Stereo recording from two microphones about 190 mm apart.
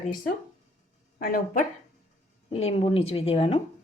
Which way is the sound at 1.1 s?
50° left (ahead or behind).